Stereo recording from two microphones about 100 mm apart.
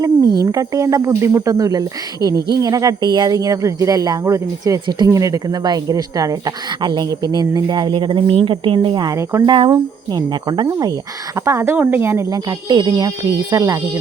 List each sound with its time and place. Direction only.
0.0 s speech: 40° right (ahead or behind); by 9.0 s 55° right (ahead or behind)
9.0 s speech: 30° right (ahead or behind)
9.5 s speech: 55° right (ahead or behind)
9.7 s speech: 40° right (ahead or behind)
11.4 s speech: 25° right (ahead or behind)
12.3 s speech: 40° right (ahead or behind)